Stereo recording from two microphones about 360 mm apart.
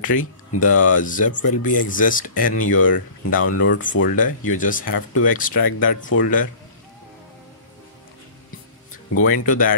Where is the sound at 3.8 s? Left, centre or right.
Left.